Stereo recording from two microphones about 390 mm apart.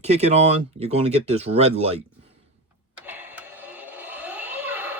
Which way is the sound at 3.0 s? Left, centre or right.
Centre.